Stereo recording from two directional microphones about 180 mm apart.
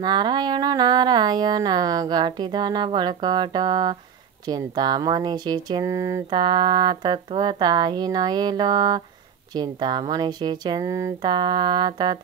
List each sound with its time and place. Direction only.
0.0 s speech: 25° right (ahead or behind)